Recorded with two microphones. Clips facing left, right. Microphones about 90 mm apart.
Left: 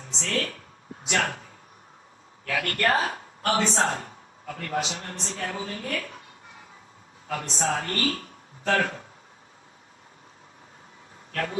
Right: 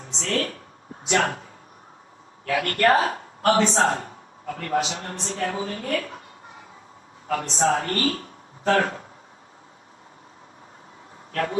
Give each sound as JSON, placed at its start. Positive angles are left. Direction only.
{"t": 0.0, "sound": "speech", "side_deg": -35}
{"t": 7.3, "sound": "speech", "side_deg": -35}
{"t": 11.3, "sound": "speech", "side_deg": -35}